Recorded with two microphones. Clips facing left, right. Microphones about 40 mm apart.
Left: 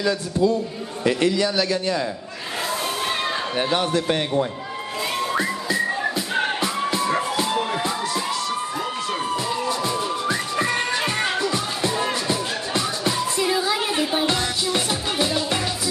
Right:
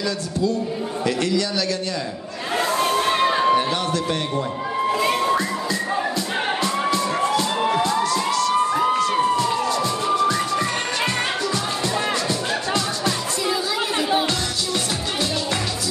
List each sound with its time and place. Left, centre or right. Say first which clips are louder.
1.0 s a man's voice: left 3 dB; left
2.5 s a sound: right 6 dB; centre
3.5 s a man's voice: right 1 dB; centre
5.0 s music: right 1 dB; centre
5.3 s music: right 2 dB; centre
6.9 s music: right 2 dB; centre
7.8 s a sound: right 4 dB; centre
9.7 s music: right 3 dB; centre
14.2 s music: left 2 dB; left